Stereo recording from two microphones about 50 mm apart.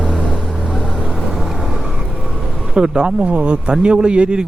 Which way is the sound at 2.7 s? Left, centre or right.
Centre.